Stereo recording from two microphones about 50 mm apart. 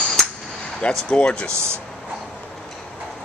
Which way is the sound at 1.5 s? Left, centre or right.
Right.